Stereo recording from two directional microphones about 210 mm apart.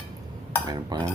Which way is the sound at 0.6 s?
20° right (ahead or behind).